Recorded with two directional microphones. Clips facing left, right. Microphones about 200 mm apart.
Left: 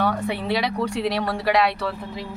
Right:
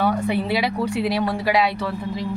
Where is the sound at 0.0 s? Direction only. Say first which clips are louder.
Right 3 dB; 5° right (ahead or behind).